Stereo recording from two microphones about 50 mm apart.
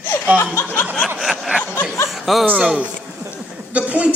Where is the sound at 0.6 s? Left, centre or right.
Left.